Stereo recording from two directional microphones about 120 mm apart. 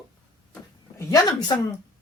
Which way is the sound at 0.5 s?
20° left (ahead or behind).